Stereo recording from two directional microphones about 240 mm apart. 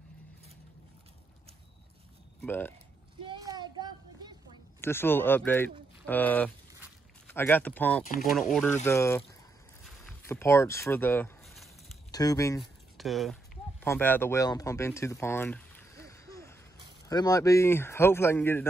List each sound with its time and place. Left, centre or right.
2.4 s speech: centre
3.3 s a sound: centre
4.8 s speech: centre
8.0 s speech: left
8.8 s speech: centre
10.2 s a sound: centre
12.1 s speech: centre
12.5 s a sound: centre
17.1 s speech: centre